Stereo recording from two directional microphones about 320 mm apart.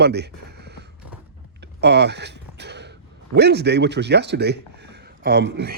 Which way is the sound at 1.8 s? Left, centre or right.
Right.